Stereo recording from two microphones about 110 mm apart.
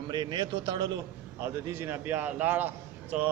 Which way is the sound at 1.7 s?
20° right (ahead or behind).